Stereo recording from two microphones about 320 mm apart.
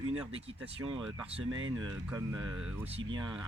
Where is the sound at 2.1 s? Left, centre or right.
Centre.